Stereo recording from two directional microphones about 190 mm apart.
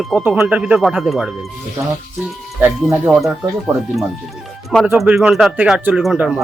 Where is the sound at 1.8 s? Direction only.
15° right (ahead or behind).